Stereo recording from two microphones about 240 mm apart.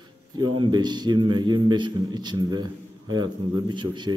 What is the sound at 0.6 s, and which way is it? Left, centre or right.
A man's voice, centre.